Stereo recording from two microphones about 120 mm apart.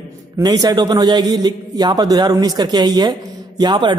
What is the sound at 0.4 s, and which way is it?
A man's voice, 35° right (ahead or behind).